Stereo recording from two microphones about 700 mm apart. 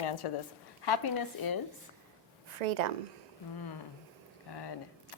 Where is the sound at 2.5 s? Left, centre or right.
Right.